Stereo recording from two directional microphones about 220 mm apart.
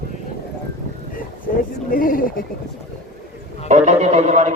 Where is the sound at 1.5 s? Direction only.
45° left (ahead or behind).